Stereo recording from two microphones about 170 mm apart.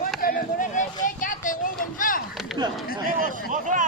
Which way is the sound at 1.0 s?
50° left (ahead or behind).